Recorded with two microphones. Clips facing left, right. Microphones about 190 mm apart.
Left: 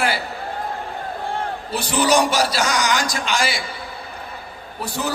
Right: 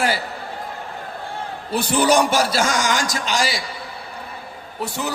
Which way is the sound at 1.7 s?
50° right (ahead or behind).